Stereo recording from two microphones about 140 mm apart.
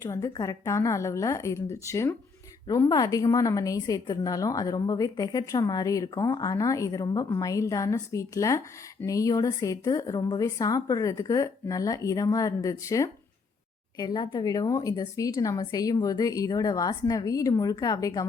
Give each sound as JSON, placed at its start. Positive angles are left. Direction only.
{"t": 0.0, "sound": "a woman's voice", "side_deg": 20}